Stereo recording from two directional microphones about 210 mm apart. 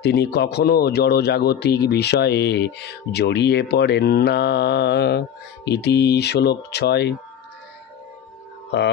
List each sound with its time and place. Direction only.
0.0 s speech: 50° left (ahead or behind)